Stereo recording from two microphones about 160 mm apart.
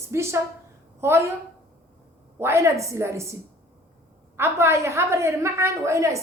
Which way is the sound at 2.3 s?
15° right (ahead or behind).